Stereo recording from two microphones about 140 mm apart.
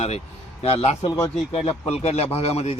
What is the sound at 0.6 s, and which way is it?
A man's voice, 45° left (ahead or behind).